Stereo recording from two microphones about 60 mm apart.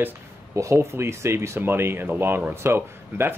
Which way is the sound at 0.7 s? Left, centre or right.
Right.